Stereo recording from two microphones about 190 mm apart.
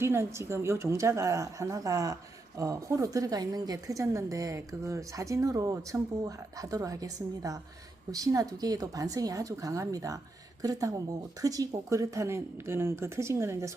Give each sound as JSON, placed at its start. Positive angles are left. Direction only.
{"t": 0.0, "sound": "a woman's voice", "side_deg": -15}